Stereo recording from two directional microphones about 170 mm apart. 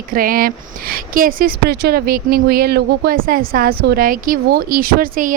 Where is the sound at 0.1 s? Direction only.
55° right (ahead or behind).